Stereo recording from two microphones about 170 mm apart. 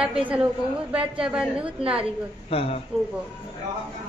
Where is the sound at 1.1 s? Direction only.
5° right (ahead or behind).